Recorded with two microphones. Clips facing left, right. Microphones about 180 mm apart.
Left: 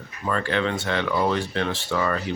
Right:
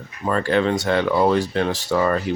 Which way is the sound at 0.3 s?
35° right (ahead or behind).